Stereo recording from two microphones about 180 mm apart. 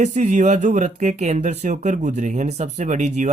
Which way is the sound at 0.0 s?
40° right (ahead or behind).